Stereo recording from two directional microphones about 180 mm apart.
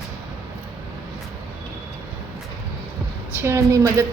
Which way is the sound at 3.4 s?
15° right (ahead or behind).